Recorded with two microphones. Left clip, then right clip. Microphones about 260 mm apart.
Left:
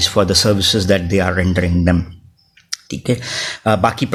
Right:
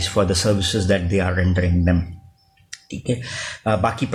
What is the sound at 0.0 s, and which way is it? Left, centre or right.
Speech, left.